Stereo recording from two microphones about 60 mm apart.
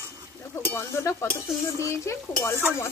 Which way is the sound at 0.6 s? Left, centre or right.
Left.